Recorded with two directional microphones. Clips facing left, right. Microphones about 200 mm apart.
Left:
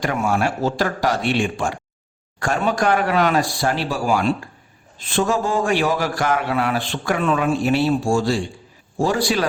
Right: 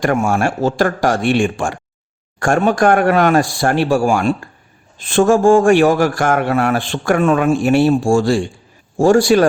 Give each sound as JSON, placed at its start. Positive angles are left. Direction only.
{"t": 0.0, "sound": "a man's voice", "side_deg": -50}